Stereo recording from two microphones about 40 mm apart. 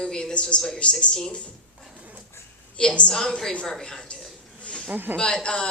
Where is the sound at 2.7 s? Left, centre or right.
Left.